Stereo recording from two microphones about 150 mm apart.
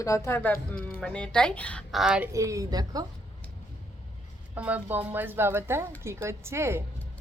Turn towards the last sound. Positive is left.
turn(degrees=-15)  # may be behind; listen again after turning